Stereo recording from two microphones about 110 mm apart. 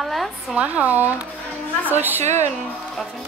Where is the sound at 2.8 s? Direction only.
Centre (ahead or behind).